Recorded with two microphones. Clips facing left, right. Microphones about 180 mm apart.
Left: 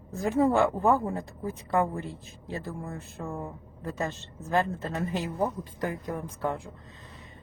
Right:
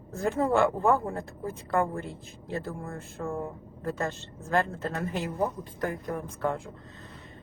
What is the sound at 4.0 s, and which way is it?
A woman's voice, 20° left (ahead or behind).